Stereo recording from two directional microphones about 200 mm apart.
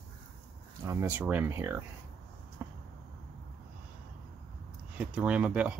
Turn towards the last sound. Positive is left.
turn(degrees=-5)  # may be behind; listen again after turning